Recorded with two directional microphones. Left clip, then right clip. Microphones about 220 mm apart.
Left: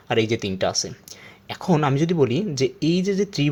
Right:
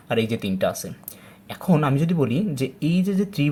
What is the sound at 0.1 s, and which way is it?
Speech, 30° left (ahead or behind).